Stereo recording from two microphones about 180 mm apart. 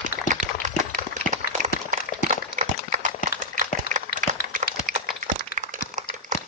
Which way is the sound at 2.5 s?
45° right (ahead or behind).